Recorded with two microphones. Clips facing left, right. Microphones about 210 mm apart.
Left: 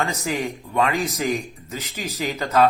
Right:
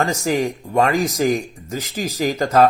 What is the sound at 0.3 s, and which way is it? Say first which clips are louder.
Speech: right 6 dB; 40° right (ahead or behind).